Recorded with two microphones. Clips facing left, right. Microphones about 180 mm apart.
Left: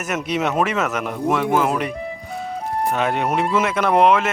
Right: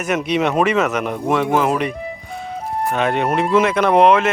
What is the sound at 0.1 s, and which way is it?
Speech, 5° left (ahead or behind).